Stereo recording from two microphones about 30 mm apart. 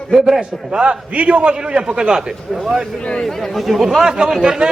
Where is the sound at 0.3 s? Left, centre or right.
Right.